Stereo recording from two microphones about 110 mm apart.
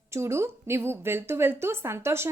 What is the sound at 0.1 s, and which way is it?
A woman's voice, 25° right (ahead or behind).